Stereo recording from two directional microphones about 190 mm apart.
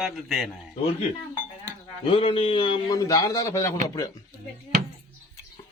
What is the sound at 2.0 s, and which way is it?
A man's voice, 30° left (ahead or behind).